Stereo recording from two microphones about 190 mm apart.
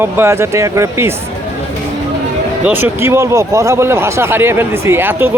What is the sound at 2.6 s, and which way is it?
Speech, 10° right (ahead or behind).